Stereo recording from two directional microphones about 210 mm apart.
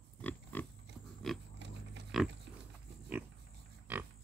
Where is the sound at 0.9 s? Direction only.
55° right (ahead or behind).